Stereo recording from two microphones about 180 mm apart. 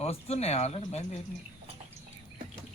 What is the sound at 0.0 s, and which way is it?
Speech, 35° left (ahead or behind).